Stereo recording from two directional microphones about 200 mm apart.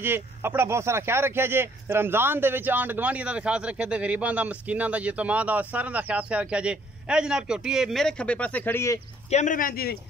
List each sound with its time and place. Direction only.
0.0 s speech: 10° right (ahead or behind); by 9.0 s 15° left (ahead or behind)
9.3 s speech: 40° left (ahead or behind)